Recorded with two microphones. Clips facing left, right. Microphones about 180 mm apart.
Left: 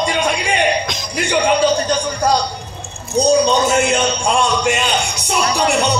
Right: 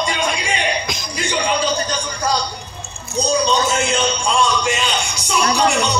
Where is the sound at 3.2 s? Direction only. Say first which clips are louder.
Left 4 dB; 60° left (ahead or behind).